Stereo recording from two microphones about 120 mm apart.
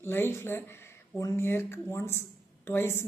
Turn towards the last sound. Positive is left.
turn(degrees=20)  # may be behind; listen again after turning